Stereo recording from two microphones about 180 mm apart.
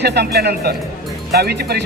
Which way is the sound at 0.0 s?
65° right (ahead or behind).